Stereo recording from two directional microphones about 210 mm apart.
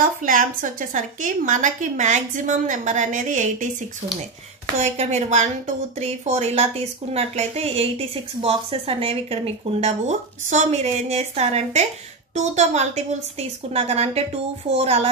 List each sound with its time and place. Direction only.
0.0 s a woman's voice: 40° right (ahead or behind)
4.7 s a woman's voice: 35° right (ahead or behind)